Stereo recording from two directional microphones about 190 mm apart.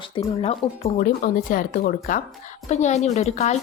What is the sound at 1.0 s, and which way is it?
A woman's voice, 45° left (ahead or behind).